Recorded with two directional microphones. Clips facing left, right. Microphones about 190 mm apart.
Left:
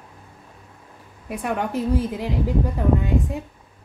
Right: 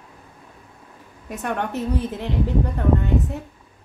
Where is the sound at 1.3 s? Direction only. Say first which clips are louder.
Left 1 dB; 10° left (ahead or behind).